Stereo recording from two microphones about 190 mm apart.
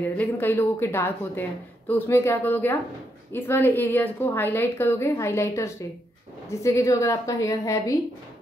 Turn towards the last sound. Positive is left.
turn(degrees=15)  # may be behind; listen again after turning